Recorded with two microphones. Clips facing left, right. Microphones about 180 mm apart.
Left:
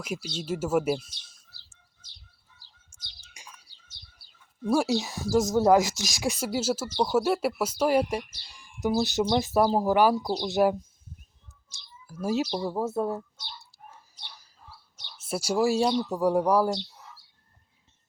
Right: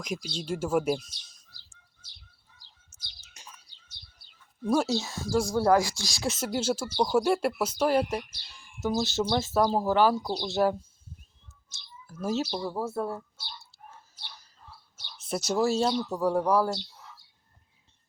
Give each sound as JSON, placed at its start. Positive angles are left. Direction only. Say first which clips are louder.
{"t": 0.0, "sound": "speech", "louder": "left 1 dB", "side_deg": 5}
{"t": 3.2, "sound": "bird", "louder": "even", "side_deg": 10}
{"t": 4.2, "sound": "bird", "louder": "even", "side_deg": -20}
{"t": 4.6, "sound": "speech", "louder": "left 1 dB", "side_deg": 10}
{"t": 15.2, "sound": "speech", "louder": "left 1 dB", "side_deg": 10}